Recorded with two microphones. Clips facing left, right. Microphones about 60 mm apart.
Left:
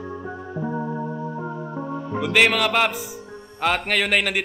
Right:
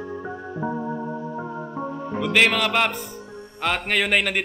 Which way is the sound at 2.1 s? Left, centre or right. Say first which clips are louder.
Left 1 dB; centre.